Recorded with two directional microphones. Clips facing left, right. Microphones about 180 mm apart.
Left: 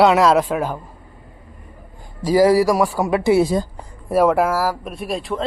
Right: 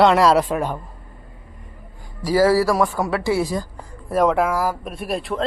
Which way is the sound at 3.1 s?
20° left (ahead or behind).